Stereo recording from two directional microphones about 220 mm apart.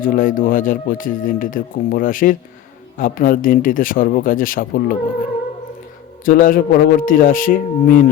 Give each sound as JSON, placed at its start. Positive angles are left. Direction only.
{"t": 0.0, "sound": "speech", "side_deg": 40}
{"t": 6.2, "sound": "speech", "side_deg": 40}